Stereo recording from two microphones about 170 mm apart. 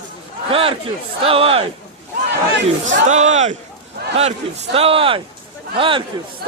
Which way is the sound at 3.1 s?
45° right (ahead or behind).